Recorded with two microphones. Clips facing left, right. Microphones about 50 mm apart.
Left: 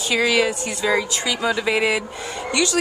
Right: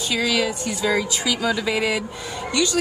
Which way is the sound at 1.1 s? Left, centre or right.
Centre.